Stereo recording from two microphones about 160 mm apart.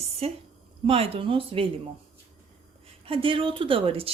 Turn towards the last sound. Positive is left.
turn(degrees=-35)  # may be behind; listen again after turning